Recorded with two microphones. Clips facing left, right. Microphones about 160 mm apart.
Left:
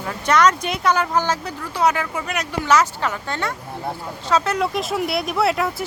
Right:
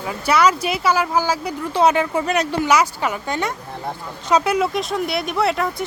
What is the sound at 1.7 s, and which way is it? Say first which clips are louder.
Speech: right 4 dB; 25° right (ahead or behind).